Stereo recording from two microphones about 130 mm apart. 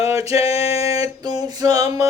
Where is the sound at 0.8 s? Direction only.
25° right (ahead or behind).